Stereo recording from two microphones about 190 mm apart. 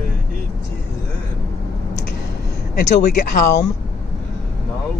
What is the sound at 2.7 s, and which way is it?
Speech, 50° left (ahead or behind).